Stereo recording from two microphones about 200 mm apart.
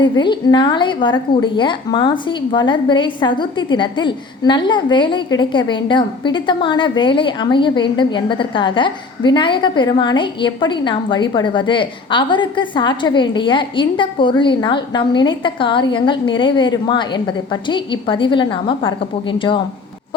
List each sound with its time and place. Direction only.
0.0 s a woman's voice: 25° left (ahead or behind)